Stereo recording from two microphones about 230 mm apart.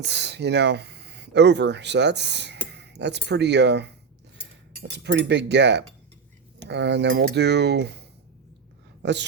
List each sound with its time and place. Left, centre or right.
0.0 s speech: right
9.0 s speech: right